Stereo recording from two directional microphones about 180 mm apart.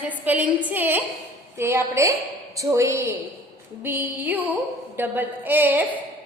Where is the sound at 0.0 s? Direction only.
10° right (ahead or behind).